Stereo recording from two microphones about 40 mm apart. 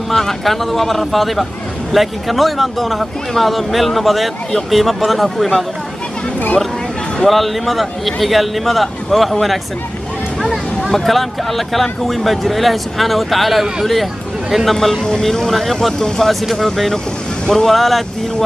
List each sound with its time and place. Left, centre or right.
0.1 s a man's voice: centre
7.2 s a man's voice: centre